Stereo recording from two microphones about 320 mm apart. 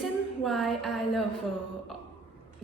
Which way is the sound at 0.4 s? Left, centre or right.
Centre.